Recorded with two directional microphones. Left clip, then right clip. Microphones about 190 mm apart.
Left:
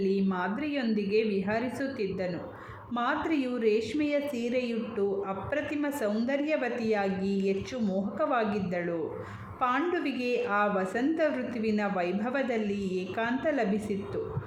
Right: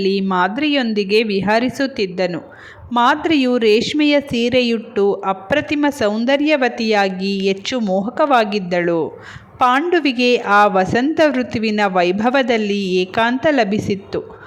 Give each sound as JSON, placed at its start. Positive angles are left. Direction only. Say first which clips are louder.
{"t": 0.0, "sound": "a woman's voice", "louder": "right 13 dB", "side_deg": -40}